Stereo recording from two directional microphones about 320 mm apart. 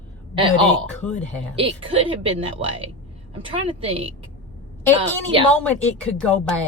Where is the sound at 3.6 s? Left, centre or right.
Centre.